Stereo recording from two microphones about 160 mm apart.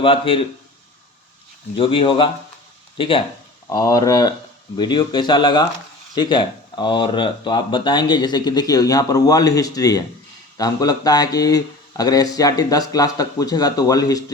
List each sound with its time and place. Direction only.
0.0 s speech: 35° left (ahead or behind)
1.7 s speech: 35° left (ahead or behind)
3.7 s speech: 20° left (ahead or behind)